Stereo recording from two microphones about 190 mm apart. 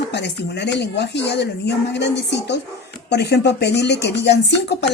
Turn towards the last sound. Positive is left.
turn(degrees=65)  # may be behind; listen again after turning